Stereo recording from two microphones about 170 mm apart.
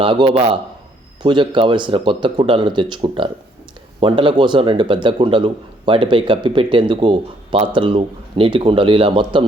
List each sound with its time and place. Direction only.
0.0 s a man's voice: 30° right (ahead or behind)